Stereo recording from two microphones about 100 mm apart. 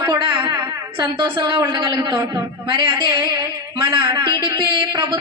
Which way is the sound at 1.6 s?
30° right (ahead or behind).